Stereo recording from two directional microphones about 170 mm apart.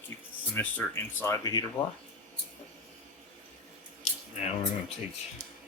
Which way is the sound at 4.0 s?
40° left (ahead or behind).